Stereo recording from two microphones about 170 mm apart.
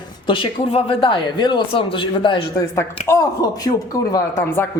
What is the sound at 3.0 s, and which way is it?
Speech, 20° left (ahead or behind).